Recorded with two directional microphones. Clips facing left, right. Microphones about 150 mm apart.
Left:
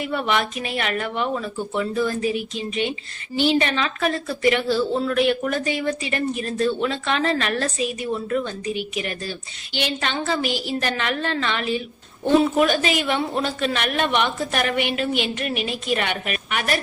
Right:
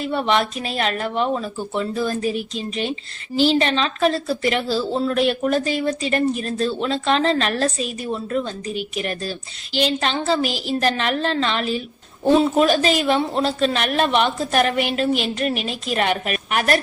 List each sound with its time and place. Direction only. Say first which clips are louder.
0.1 s a woman's voice: right 4 dB; 30° right (ahead or behind)
3.3 s a woman's voice: right 2 dB; 35° right (ahead or behind)
15.5 s a woman's voice: even; centre (ahead or behind)
15.9 s a woman's voice: right 4 dB; 40° right (ahead or behind)